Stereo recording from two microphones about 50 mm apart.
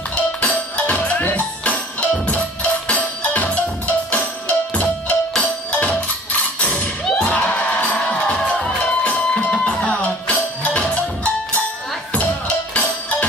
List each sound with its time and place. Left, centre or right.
0.1 s music: left
8.1 s music: left